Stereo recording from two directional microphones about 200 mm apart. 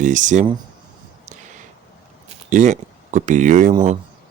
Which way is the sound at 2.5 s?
40° right (ahead or behind).